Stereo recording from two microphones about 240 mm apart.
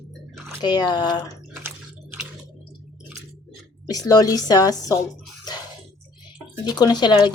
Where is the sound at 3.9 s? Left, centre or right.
Centre.